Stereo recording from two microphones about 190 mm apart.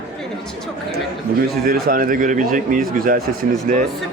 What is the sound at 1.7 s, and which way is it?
A man's voice, 50° right (ahead or behind).